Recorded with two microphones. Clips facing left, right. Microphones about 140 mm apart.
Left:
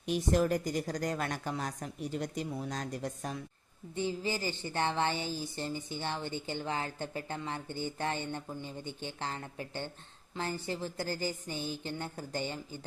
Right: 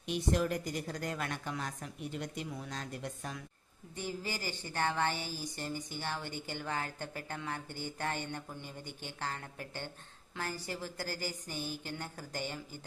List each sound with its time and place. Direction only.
0.0 s speech: 45° left (ahead or behind)
4.2 s a woman's voice: 20° left (ahead or behind)